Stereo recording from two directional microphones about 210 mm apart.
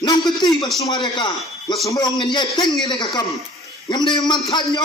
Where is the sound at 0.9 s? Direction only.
20° left (ahead or behind).